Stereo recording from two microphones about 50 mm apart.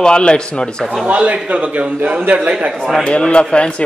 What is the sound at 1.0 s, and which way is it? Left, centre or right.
Speech, right.